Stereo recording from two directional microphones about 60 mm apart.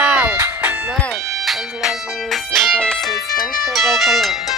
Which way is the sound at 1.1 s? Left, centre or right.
Centre.